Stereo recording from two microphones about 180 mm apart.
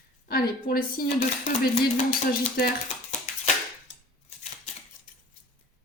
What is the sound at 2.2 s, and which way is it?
Speech, 55° left (ahead or behind).